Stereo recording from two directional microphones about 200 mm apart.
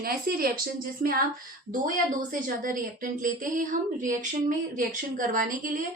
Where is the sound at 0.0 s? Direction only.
50° right (ahead or behind).